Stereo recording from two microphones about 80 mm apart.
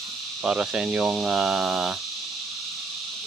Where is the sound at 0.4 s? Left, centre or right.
Centre.